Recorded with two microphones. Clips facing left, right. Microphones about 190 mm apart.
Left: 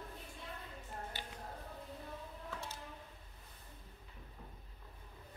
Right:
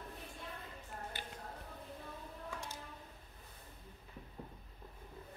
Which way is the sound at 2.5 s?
15° right (ahead or behind).